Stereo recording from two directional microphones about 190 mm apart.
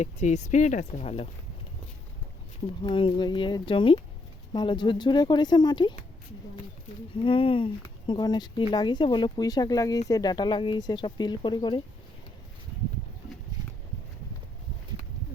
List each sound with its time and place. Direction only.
0.0 s speech: 35° left (ahead or behind)
2.8 s speech: 25° left (ahead or behind)
7.1 s speech: 30° left (ahead or behind)